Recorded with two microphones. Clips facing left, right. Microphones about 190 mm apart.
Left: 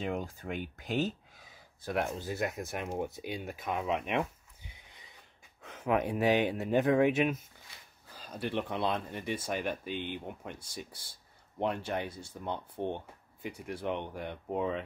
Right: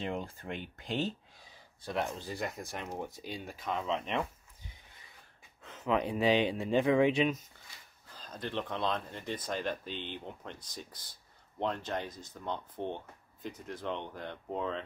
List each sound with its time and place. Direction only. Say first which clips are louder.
0.0 s speech: left 2 dB; centre (ahead or behind)
2.1 s speech: left 4 dB; 5° left (ahead or behind)
5.6 s a sound: left 1 dB; 10° left (ahead or behind)
6.0 s speech: right 1 dB; 5° left (ahead or behind)